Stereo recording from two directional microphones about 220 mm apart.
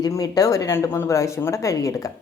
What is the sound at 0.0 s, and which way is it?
A woman's voice, 15° left (ahead or behind).